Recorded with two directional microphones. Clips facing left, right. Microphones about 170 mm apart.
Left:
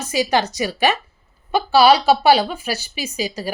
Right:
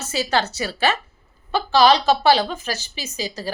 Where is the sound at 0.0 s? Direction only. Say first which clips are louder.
Left 3 dB; 15° left (ahead or behind).